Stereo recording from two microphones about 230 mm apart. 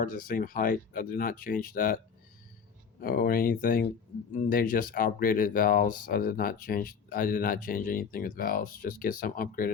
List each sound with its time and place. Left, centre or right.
0.0 s speech: left
3.0 s speech: left